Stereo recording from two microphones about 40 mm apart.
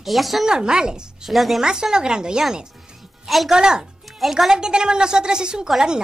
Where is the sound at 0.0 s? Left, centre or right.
Centre.